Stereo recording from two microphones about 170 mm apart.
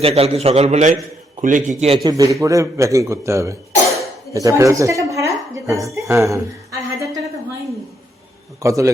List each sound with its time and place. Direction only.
0.0 s a man's voice: 35° right (ahead or behind)
2.0 s a man's voice: 20° right (ahead or behind)
5.8 s a sound: 15° right (ahead or behind)
8.6 s a man's voice: 20° right (ahead or behind)